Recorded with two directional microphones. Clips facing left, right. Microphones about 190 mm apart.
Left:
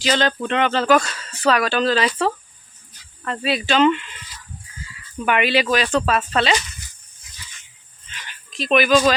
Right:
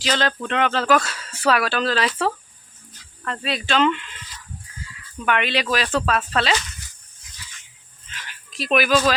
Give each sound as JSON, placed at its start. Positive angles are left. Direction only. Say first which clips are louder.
{"t": 0.0, "sound": "speech", "louder": "left 3 dB", "side_deg": 0}
{"t": 5.1, "sound": "speech", "louder": "left 4 dB", "side_deg": 10}
{"t": 8.1, "sound": "a sound", "louder": "left 2 dB", "side_deg": -5}